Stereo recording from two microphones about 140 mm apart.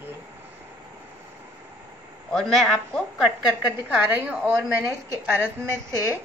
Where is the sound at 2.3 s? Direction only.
Centre (ahead or behind).